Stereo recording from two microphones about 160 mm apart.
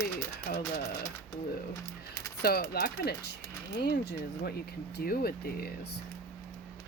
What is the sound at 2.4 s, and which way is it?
Speech, 75° left (ahead or behind).